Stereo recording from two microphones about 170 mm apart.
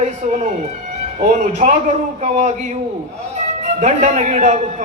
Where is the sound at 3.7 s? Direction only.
45° right (ahead or behind).